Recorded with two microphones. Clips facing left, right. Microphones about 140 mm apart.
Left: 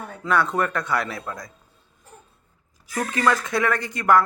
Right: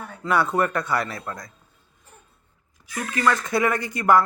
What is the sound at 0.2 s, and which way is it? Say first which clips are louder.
Speech: right 1 dB; 5° right (ahead or behind).